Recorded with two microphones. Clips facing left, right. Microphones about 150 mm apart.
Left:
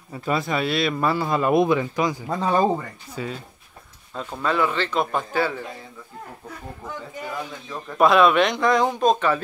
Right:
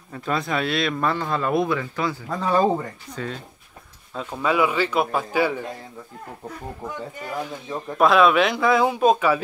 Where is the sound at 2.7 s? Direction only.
5° left (ahead or behind); by 5.6 s 10° right (ahead or behind).